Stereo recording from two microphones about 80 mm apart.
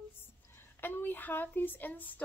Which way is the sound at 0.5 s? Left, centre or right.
Left.